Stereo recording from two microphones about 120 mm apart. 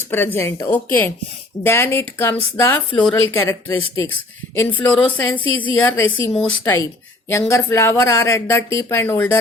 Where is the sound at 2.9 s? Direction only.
5° left (ahead or behind).